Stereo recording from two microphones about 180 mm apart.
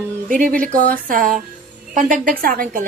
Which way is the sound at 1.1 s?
50° right (ahead or behind).